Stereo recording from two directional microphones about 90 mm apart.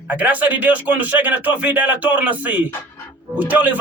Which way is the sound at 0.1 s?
15° right (ahead or behind).